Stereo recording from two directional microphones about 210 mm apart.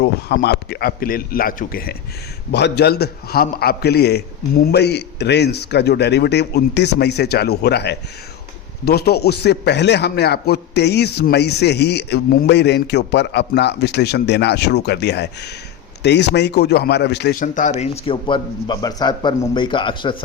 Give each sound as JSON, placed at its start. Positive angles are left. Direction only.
{"t": 0.0, "sound": "a man's voice", "side_deg": 50}
{"t": 17.4, "sound": "speech", "side_deg": 35}